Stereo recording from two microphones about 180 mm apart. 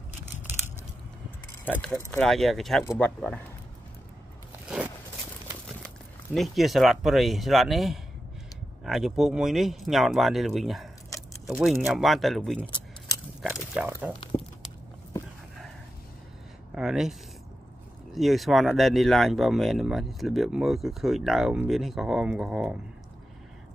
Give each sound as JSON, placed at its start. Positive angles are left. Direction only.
{"t": 1.6, "sound": "speech", "side_deg": 10}
{"t": 6.3, "sound": "speech", "side_deg": 0}
{"t": 12.6, "sound": "keys jangling", "side_deg": 25}
{"t": 13.4, "sound": "speech", "side_deg": -5}
{"t": 16.7, "sound": "speech", "side_deg": -5}
{"t": 18.1, "sound": "speech", "side_deg": 0}